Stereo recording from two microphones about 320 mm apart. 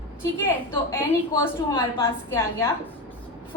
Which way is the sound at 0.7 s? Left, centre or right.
Centre.